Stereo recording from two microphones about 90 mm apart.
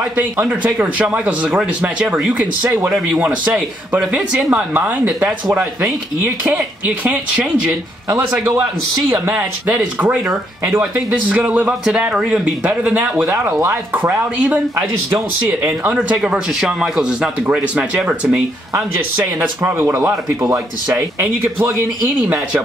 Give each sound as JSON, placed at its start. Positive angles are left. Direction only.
{"t": 0.1, "sound": "a man's voice", "side_deg": -20}
{"t": 11.1, "sound": "a man's voice", "side_deg": -15}
{"t": 16.2, "sound": "a man's voice", "side_deg": -5}